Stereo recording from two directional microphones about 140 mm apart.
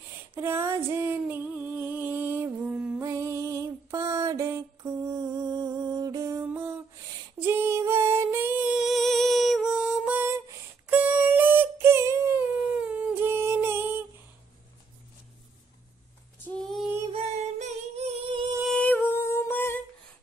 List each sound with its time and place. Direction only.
0.3 s female singing: 15° right (ahead or behind)
3.0 s music: 25° right (ahead or behind)
12.8 s a sound: 10° right (ahead or behind)
16.4 s female singing: centre (ahead or behind)
17.1 s music: 50° right (ahead or behind)
18.7 s humming: 10° left (ahead or behind)